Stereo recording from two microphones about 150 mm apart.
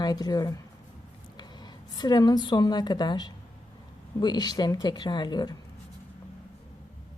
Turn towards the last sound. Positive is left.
turn(degrees=30)  # may be behind; listen again after turning